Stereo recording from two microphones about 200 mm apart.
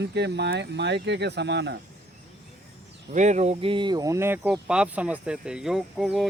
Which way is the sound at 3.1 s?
35° right (ahead or behind).